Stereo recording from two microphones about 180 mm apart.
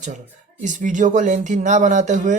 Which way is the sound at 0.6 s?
45° right (ahead or behind).